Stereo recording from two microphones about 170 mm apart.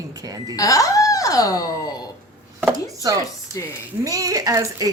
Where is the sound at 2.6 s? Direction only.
15° right (ahead or behind).